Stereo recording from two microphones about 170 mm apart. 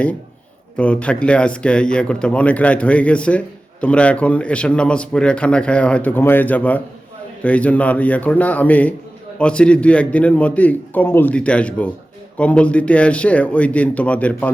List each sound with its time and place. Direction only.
0.8 s speech: 5° left (ahead or behind)